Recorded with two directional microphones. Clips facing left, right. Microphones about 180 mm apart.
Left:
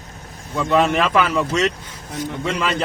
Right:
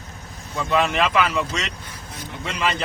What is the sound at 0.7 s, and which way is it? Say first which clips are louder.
Speech: left 3 dB; 45° left (ahead or behind).